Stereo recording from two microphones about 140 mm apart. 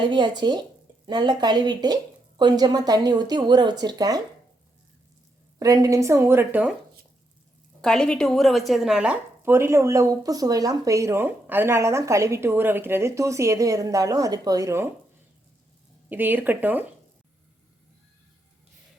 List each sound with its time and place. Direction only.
0.0 s a woman's voice: 35° right (ahead or behind)
5.5 s a woman's voice: 25° right (ahead or behind)
7.8 s a woman's voice: 5° left (ahead or behind); by 14.8 s 20° right (ahead or behind)
16.0 s speech: 10° right (ahead or behind)